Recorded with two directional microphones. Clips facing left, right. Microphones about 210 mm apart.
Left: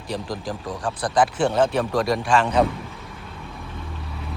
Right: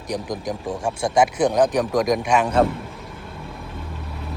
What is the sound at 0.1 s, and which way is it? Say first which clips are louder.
Speech: right 2 dB; 20° right (ahead or behind).